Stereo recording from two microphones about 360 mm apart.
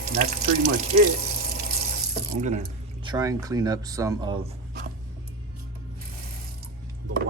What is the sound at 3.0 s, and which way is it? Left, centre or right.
Speech, centre.